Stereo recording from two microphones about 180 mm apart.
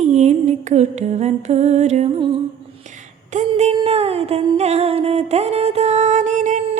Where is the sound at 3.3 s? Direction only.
40° right (ahead or behind).